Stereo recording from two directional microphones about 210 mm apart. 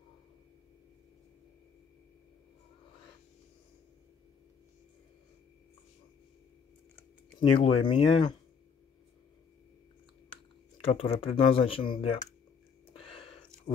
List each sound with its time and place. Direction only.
7.5 s speech: 25° left (ahead or behind)
10.9 s speech: 25° left (ahead or behind)
13.1 s a sound: 25° left (ahead or behind)